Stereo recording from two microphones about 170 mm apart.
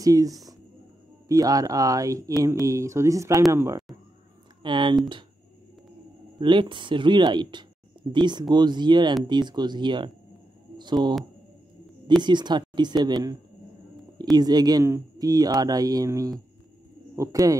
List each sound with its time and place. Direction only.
0.0 s speech: 20° right (ahead or behind)
1.3 s speech: 20° right (ahead or behind)
4.6 s speech: 30° right (ahead or behind)
6.4 s speech: 30° right (ahead or behind)
12.2 s speech: 25° right (ahead or behind)